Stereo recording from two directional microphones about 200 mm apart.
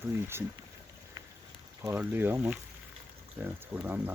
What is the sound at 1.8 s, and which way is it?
Speech, 10° right (ahead or behind).